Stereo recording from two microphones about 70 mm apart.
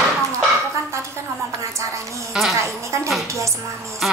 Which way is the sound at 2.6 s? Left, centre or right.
Right.